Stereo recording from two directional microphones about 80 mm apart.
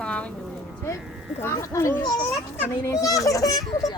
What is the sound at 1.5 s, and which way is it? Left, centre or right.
A child's voice, left.